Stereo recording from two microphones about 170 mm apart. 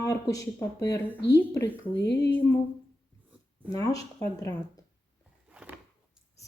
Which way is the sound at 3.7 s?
20° left (ahead or behind).